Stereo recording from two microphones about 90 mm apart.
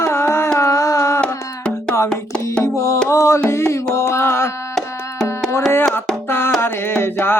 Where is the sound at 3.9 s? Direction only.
30° left (ahead or behind).